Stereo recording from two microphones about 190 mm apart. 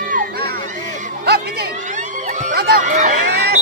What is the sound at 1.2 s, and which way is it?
Music, 55° right (ahead or behind).